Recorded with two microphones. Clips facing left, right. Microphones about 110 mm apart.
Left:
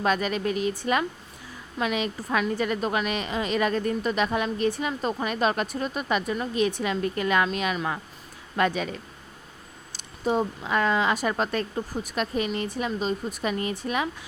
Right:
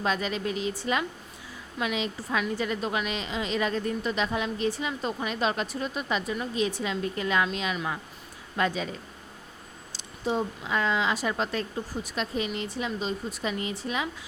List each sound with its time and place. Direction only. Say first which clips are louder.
0.0 s a woman's voice: left 4 dB; 55° left (ahead or behind)
9.9 s a woman's voice: left 3 dB; 50° left (ahead or behind)